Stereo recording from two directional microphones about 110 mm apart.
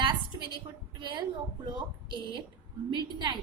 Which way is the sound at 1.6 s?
45° right (ahead or behind).